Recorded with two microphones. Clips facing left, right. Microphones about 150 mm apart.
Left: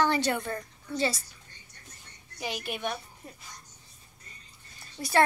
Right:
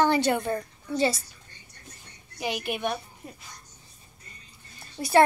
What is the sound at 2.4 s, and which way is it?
Speech, 60° right (ahead or behind).